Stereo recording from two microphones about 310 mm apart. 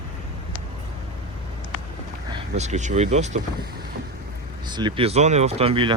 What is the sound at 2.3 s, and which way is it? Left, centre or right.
Speech, right.